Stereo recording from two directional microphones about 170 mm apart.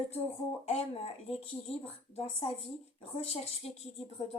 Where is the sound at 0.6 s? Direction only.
35° left (ahead or behind).